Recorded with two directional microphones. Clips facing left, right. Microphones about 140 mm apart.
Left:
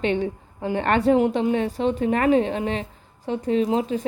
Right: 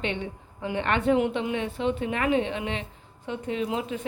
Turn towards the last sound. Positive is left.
turn(degrees=35)  # may be behind; listen again after turning